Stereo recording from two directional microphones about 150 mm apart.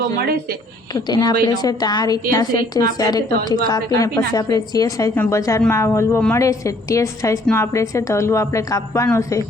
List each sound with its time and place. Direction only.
0.9 s a woman's voice: 25° left (ahead or behind)